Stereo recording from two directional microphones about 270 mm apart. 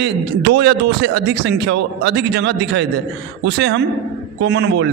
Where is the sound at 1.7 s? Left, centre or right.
Right.